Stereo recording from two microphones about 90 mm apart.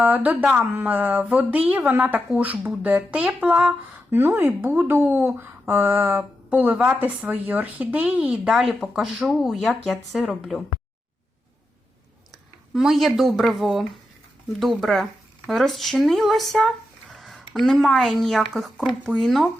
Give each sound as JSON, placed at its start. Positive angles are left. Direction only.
{"t": 0.0, "sound": "speech", "side_deg": -20}
{"t": 4.1, "sound": "speech", "side_deg": -25}
{"t": 12.3, "sound": "speech", "side_deg": -5}